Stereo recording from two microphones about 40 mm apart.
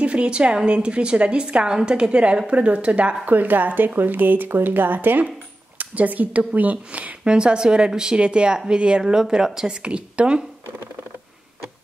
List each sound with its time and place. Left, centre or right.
0.0 s a woman's voice: right
3.3 s speech: right
7.2 s a woman's voice: right
9.0 s speech: centre
9.8 s a woman's voice: right